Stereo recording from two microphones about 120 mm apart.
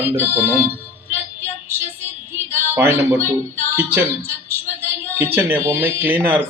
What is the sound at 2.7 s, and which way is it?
Speech, 20° right (ahead or behind).